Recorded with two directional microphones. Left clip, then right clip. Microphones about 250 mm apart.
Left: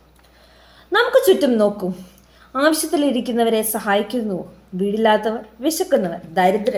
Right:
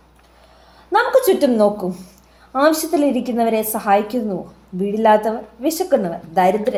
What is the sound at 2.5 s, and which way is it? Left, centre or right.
A woman's voice, centre.